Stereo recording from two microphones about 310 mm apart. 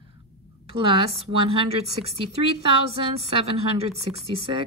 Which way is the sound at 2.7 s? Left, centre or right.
Centre.